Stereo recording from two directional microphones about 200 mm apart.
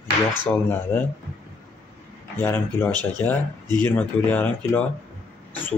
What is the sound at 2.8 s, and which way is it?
Speech, 20° right (ahead or behind).